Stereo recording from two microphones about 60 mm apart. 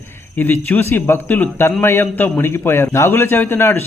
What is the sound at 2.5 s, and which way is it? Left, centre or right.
Speech, left.